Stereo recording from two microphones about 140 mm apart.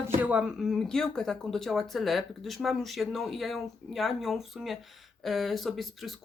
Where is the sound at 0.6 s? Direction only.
Centre (ahead or behind).